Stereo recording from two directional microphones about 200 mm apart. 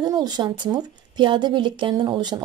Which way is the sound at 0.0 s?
20° right (ahead or behind).